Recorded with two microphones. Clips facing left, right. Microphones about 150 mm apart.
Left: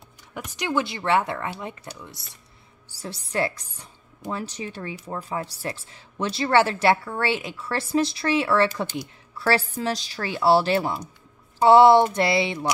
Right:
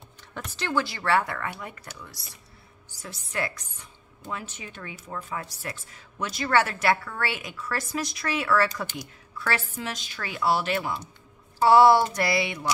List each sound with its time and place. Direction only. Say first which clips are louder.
0.3 s a woman's voice: left 2 dB; 15° left (ahead or behind)